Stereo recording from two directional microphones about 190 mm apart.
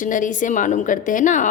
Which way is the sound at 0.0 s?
45° left (ahead or behind).